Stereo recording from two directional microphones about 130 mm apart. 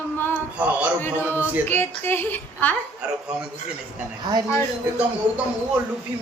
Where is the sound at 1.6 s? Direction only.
15° left (ahead or behind).